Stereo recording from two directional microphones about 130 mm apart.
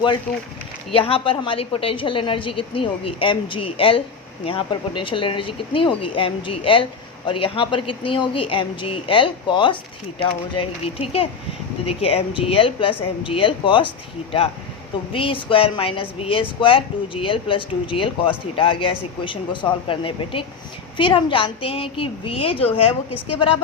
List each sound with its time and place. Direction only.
0.9 s speech: 45° left (ahead or behind)
15.1 s speech: 40° left (ahead or behind)